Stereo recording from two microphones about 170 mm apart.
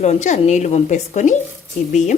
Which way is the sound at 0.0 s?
45° left (ahead or behind).